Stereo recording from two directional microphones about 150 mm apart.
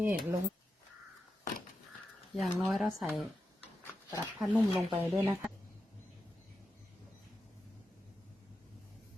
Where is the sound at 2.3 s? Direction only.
Centre (ahead or behind).